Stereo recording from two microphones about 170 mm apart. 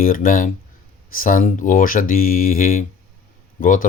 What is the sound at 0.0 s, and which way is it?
Speech, 55° left (ahead or behind).